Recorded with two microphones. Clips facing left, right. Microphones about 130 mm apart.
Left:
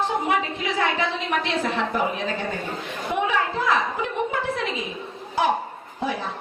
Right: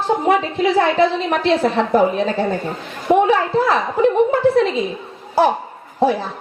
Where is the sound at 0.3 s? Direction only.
35° right (ahead or behind).